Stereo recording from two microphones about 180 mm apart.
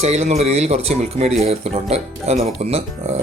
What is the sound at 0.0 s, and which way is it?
Speech, 35° right (ahead or behind).